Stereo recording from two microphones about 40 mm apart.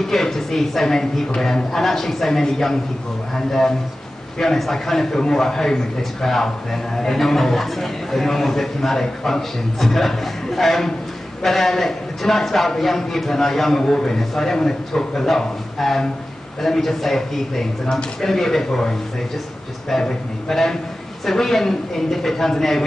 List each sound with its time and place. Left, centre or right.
0.0 s a man's voice: centre
13.8 s a man's voice: left
14.1 s a man's voice: centre